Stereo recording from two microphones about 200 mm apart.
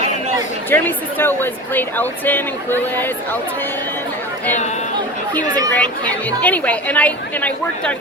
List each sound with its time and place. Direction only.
0.7 s speech: 10° left (ahead or behind)
5.4 s speech: 20° right (ahead or behind)
5.7 s speech: 10° left (ahead or behind)